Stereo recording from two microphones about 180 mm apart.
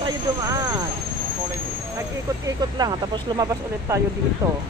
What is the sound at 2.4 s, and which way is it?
Speech, 20° right (ahead or behind).